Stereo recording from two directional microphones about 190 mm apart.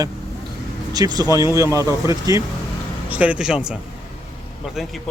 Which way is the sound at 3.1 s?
5° right (ahead or behind).